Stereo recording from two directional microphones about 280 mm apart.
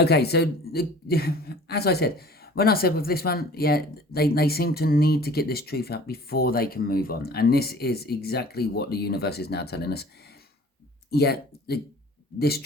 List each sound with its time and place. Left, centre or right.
0.0 s a woman's voice: left
11.1 s a woman's voice: left